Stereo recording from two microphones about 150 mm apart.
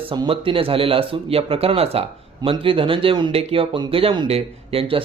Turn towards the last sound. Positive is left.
turn(degrees=-40)  # may be behind; listen again after turning